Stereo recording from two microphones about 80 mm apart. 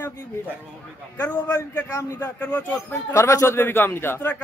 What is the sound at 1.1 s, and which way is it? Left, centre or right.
A man's voice, left.